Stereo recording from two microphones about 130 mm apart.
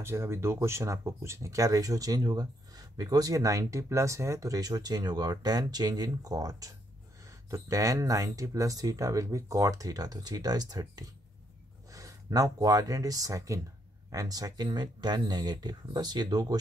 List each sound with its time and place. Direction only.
0.0 s speech: 20° right (ahead or behind)